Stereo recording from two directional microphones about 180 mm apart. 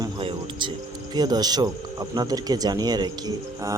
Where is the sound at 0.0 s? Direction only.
25° right (ahead or behind).